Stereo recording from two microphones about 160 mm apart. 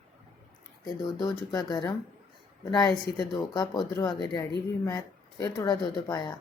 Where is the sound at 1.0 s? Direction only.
25° left (ahead or behind).